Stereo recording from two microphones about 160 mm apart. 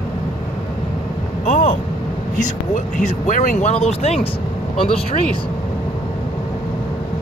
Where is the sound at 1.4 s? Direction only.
50° left (ahead or behind).